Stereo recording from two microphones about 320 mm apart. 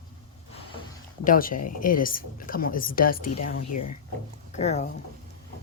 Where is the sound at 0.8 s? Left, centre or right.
Left.